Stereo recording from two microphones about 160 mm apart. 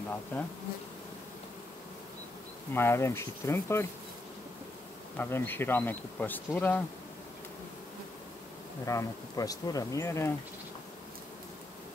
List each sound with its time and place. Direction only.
2.7 s speech: 15° left (ahead or behind)
5.1 s speech: 10° left (ahead or behind)
8.8 s speech: 20° left (ahead or behind)